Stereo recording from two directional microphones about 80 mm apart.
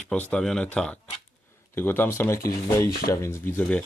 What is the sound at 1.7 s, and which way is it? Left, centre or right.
Speech, left.